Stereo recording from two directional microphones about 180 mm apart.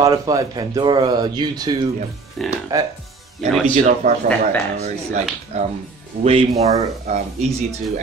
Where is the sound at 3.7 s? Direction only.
45° right (ahead or behind).